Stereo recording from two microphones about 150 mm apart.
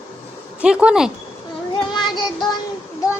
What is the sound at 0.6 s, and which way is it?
Speech, 5° right (ahead or behind).